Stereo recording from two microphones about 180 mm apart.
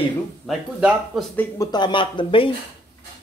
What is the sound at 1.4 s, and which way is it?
Speech, 20° left (ahead or behind).